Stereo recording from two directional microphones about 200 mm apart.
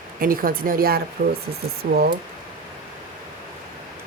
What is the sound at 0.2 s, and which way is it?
Speech, 45° right (ahead or behind).